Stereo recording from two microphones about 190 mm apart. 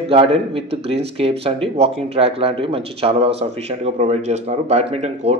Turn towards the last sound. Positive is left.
turn(degrees=-35)  # may be behind; listen again after turning